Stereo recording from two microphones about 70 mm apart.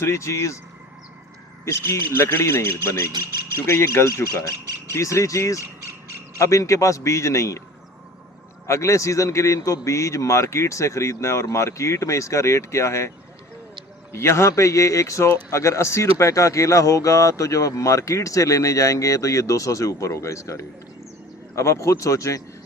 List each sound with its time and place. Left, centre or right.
0.0 s speech: left
1.6 s speech: left
8.6 s speech: left
14.1 s speech: left